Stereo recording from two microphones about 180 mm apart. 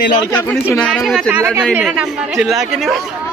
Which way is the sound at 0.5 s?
5° left (ahead or behind).